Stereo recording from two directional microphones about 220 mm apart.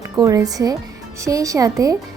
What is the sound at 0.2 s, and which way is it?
Speech, 15° right (ahead or behind).